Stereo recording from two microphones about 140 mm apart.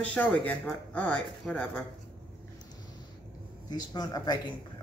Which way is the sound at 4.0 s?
30° left (ahead or behind).